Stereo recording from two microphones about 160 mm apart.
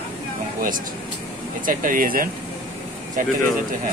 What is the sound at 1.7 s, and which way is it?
Speech, 60° right (ahead or behind).